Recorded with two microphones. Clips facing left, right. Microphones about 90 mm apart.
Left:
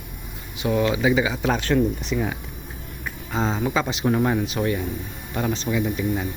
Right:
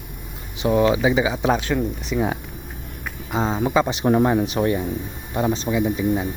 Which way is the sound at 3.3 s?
15° right (ahead or behind).